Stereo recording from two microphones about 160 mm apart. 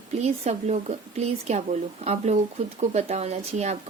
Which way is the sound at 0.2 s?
45° right (ahead or behind).